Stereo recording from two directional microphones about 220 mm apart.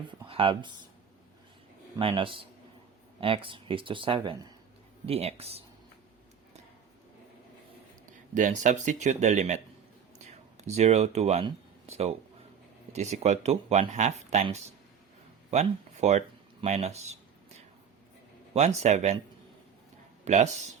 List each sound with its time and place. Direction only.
0.3 s speech: 25° right (ahead or behind)
2.0 s speech: 25° right (ahead or behind)
8.4 s speech: 35° right (ahead or behind)
15.4 s a sound: 30° right (ahead or behind)
18.5 s speech: 30° right (ahead or behind)
20.2 s speech: 30° right (ahead or behind)